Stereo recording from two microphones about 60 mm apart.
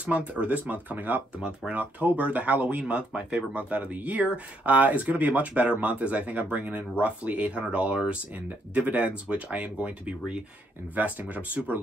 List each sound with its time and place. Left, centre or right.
0.0 s speech: right